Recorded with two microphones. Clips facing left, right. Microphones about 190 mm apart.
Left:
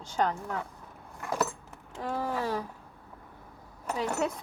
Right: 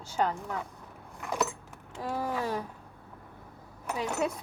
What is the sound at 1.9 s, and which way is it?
Speech, 10° right (ahead or behind).